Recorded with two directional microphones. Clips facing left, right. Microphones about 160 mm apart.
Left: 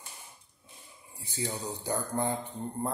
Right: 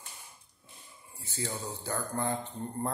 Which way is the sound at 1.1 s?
15° left (ahead or behind).